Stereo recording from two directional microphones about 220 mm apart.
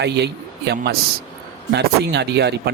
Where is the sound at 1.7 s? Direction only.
50° right (ahead or behind).